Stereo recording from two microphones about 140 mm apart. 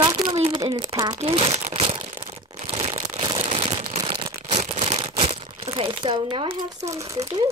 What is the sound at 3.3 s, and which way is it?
Crumpling, 50° right (ahead or behind).